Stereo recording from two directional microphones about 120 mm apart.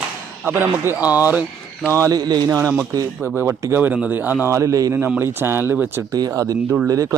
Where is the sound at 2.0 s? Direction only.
30° right (ahead or behind).